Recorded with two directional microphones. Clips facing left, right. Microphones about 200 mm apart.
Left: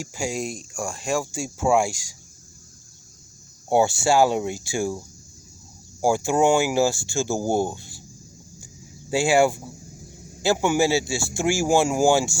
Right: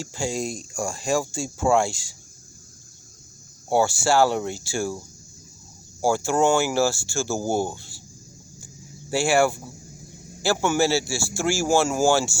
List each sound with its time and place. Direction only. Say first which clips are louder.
0.0 s speech: even; 10° left (ahead or behind)
3.7 s speech: left 1 dB; 20° left (ahead or behind)
6.0 s speech: left 1 dB; 15° left (ahead or behind)
8.6 s a sound: right 1 dB; 15° left (ahead or behind)
10.4 s speech: left 1 dB; 15° left (ahead or behind)